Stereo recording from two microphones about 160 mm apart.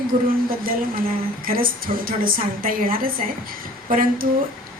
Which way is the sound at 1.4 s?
65° right (ahead or behind).